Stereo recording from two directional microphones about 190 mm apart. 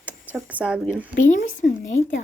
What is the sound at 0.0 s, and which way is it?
A woman's voice, 5° right (ahead or behind).